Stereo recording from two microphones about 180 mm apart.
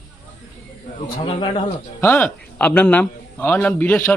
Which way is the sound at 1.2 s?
30° left (ahead or behind).